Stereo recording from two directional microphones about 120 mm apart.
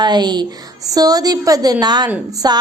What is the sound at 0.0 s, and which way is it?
A woman's voice, 35° right (ahead or behind).